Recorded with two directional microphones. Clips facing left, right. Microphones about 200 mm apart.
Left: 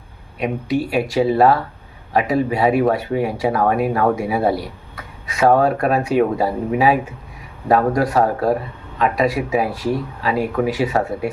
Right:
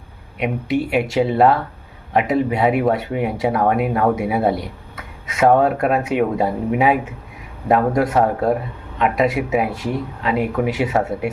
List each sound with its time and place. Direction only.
0.3 s speech: 20° right (ahead or behind)